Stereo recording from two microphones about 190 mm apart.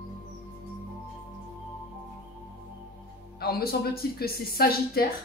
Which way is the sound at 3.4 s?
55° left (ahead or behind).